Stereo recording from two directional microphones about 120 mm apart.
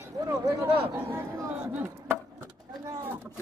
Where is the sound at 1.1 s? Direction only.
20° right (ahead or behind).